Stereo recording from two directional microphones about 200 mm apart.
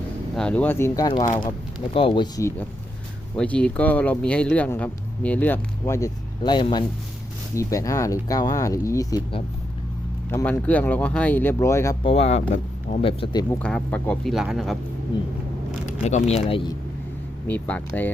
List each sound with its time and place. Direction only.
0.3 s speech: 5° left (ahead or behind)
3.3 s speech: 5° left (ahead or behind)
12.0 s speech: 30° left (ahead or behind)
13.6 s speech: 5° left (ahead or behind)
15.9 s speech: 35° left (ahead or behind)
17.5 s speech: 10° left (ahead or behind)